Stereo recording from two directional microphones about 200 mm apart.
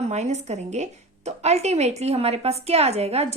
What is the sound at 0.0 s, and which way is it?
A woman's voice, 35° right (ahead or behind).